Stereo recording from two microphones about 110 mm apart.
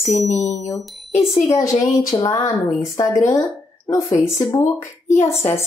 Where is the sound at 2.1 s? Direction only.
30° left (ahead or behind).